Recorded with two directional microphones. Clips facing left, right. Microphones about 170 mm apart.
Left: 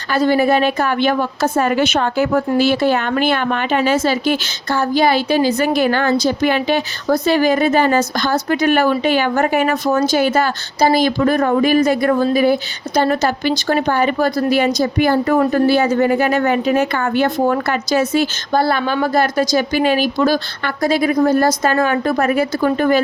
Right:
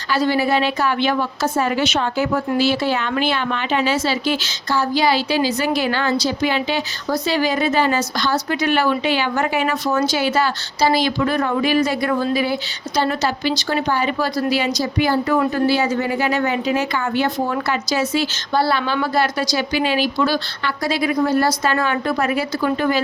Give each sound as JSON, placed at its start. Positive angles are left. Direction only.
{"t": 0.1, "sound": "a woman's voice", "side_deg": 50}